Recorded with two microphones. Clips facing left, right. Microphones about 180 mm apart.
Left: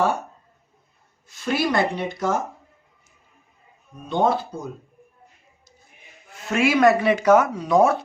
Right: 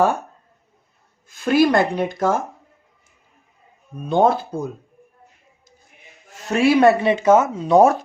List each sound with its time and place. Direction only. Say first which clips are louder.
1.3 s speech: right 7 dB; 50° right (ahead or behind)
4.1 s speech: right 4 dB; 50° right (ahead or behind)
6.5 s speech: right 3 dB; 30° right (ahead or behind)